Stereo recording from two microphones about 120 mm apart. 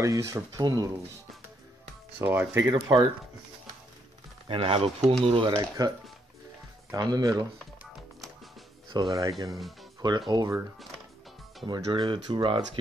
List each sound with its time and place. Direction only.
0.0 s speech: 25° right (ahead or behind)
2.1 s speech: 15° right (ahead or behind)
2.7 s speech: 40° right (ahead or behind)
4.5 s speech: 50° right (ahead or behind)
5.6 s speech: 35° right (ahead or behind)
8.9 s speech: 35° right (ahead or behind)
11.6 s speech: 40° right (ahead or behind)